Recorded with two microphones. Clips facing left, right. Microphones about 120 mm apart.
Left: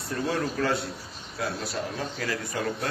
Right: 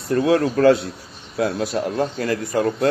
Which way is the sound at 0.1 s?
65° right (ahead or behind).